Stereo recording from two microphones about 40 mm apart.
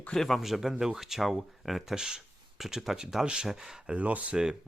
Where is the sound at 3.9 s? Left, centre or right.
Right.